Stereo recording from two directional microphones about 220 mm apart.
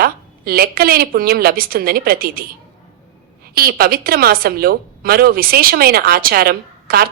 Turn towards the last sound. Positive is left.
turn(degrees=-45)  # may be behind; listen again after turning